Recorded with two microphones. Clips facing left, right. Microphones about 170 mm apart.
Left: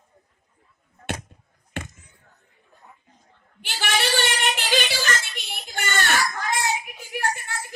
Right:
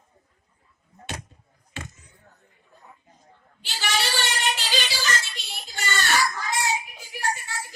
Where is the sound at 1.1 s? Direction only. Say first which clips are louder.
Left 6 dB; 55° left (ahead or behind).